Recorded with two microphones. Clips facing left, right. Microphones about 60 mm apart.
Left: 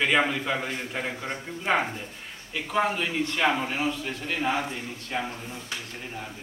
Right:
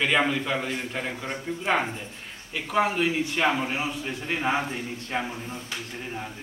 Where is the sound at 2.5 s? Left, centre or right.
Centre.